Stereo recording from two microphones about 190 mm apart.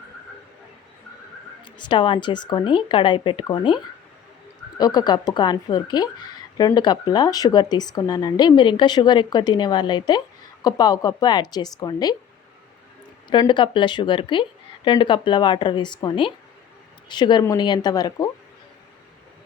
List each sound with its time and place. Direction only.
1.6 s a woman's voice: 25° left (ahead or behind)
4.8 s a woman's voice: 20° left (ahead or behind)
13.3 s a woman's voice: 25° left (ahead or behind)